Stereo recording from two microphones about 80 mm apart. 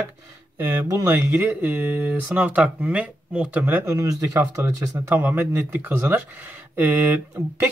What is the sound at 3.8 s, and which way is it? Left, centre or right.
Speech, right.